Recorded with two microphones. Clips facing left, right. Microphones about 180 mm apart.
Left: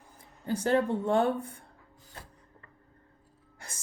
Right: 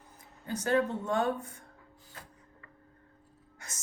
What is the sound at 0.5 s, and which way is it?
Speech, 30° left (ahead or behind).